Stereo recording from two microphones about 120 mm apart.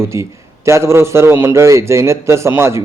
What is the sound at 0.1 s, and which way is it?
A man's voice, 25° right (ahead or behind).